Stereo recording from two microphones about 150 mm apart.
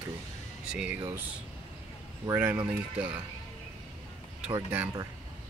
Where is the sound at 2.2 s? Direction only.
15° right (ahead or behind).